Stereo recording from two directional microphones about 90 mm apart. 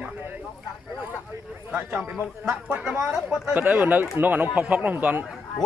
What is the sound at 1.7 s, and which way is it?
Speech, 20° right (ahead or behind).